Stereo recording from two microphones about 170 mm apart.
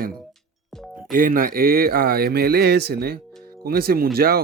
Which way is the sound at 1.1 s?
55° right (ahead or behind).